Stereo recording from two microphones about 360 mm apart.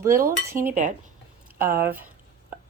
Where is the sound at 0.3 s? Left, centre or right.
Centre.